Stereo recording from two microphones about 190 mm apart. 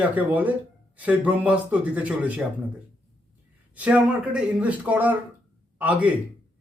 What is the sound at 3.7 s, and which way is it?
A man's voice, 5° right (ahead or behind).